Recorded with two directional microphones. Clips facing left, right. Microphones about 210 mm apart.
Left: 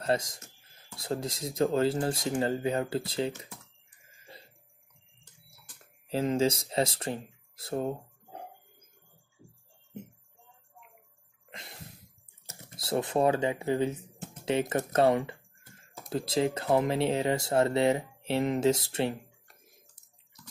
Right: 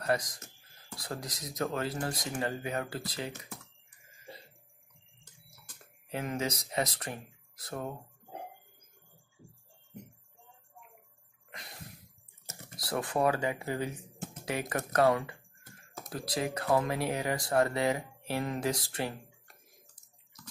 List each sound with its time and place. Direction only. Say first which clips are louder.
0.0 s speech: left 2 dB; 25° left (ahead or behind)
6.0 s speech: left 8 dB; 30° left (ahead or behind)
12.7 s speech: left 4 dB; 25° left (ahead or behind)